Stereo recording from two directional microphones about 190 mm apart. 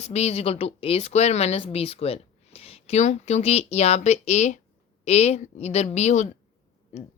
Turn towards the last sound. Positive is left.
turn(degrees=35)  # may be behind; listen again after turning